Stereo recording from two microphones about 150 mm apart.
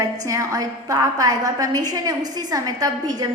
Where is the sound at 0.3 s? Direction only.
20° right (ahead or behind).